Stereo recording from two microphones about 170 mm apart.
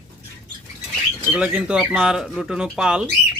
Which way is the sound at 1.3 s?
5° right (ahead or behind).